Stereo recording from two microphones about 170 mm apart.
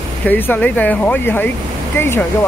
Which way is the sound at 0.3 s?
10° left (ahead or behind).